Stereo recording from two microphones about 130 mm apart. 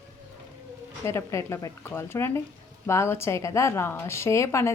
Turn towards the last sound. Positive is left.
turn(degrees=20)  # may be behind; listen again after turning